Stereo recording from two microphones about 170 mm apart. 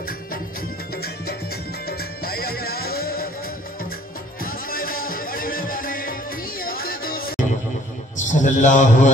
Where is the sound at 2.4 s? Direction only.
65° left (ahead or behind).